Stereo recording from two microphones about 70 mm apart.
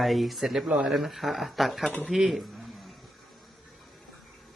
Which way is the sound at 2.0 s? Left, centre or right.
Centre.